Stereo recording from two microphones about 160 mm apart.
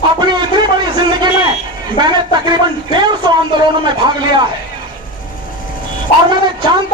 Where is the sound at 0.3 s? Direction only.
30° right (ahead or behind).